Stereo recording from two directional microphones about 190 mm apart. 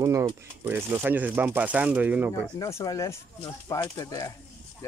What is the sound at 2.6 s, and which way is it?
Speech, 15° left (ahead or behind).